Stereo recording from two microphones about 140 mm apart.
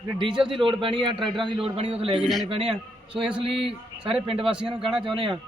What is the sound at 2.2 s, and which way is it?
Speech, centre (ahead or behind).